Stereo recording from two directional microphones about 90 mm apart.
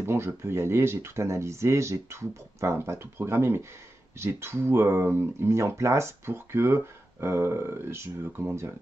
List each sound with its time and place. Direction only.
0.0 s speech: 30° right (ahead or behind)